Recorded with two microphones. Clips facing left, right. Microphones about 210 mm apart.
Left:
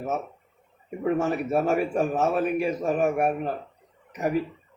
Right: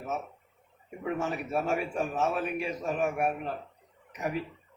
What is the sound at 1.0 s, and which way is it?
A man's voice, 45° left (ahead or behind).